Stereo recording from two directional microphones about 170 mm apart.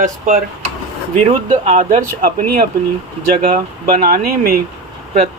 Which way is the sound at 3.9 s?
60° right (ahead or behind).